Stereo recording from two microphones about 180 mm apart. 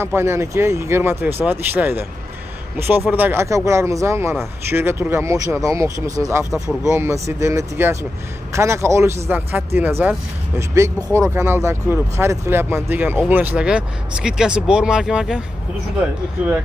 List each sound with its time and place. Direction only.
0.0 s speech: 15° right (ahead or behind)
3.1 s speech: 10° right (ahead or behind)
6.5 s speech: centre (ahead or behind)
6.9 s speech: 15° right (ahead or behind)
11.3 s speech: 15° right (ahead or behind)